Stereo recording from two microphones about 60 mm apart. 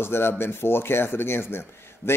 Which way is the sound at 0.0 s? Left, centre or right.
Left.